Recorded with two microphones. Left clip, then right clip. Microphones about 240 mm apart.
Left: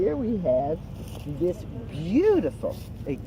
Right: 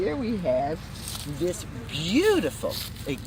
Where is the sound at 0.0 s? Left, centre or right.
Right.